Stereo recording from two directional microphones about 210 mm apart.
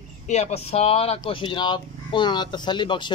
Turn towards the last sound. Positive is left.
turn(degrees=20)  # may be behind; listen again after turning